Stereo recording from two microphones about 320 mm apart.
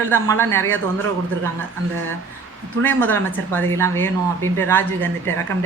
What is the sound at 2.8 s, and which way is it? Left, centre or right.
Speech, centre.